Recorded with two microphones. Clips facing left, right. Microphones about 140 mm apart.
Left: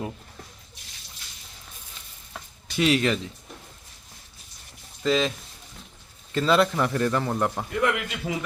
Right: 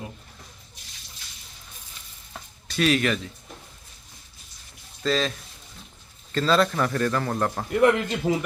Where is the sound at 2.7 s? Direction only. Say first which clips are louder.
Even; 20° left (ahead or behind).